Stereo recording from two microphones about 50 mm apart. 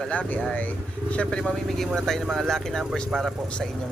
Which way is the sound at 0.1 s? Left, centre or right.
Left.